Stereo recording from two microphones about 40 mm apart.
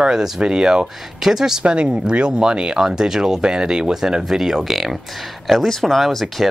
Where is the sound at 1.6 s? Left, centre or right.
Right.